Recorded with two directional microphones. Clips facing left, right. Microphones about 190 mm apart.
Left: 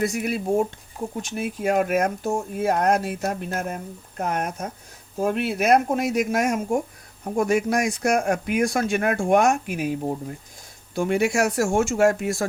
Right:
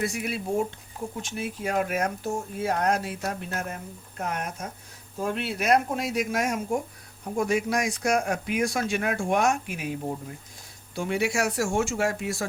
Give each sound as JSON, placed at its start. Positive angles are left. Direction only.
{"t": 0.0, "sound": "speech", "side_deg": 45}
{"t": 10.9, "sound": "speech", "side_deg": 50}